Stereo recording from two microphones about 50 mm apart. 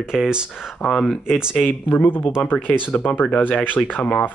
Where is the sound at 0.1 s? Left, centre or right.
Centre.